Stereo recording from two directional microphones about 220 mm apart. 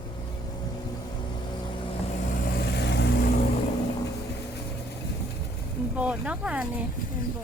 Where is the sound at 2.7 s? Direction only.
50° left (ahead or behind).